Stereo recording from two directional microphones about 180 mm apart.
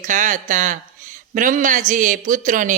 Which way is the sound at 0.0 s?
45° right (ahead or behind).